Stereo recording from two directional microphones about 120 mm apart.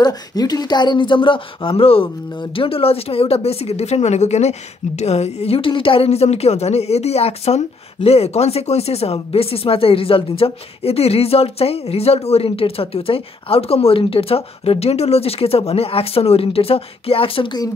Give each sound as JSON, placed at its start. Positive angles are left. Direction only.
{"t": 0.0, "sound": "speech", "side_deg": 35}